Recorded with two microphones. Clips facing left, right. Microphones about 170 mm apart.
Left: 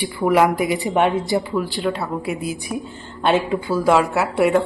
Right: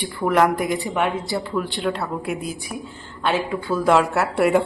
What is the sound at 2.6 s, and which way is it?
A woman's voice, 20° left (ahead or behind).